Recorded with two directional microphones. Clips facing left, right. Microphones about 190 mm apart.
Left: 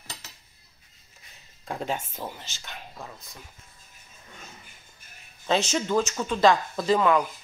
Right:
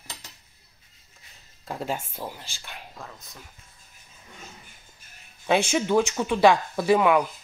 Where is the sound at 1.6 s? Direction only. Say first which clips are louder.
Even; 5° right (ahead or behind).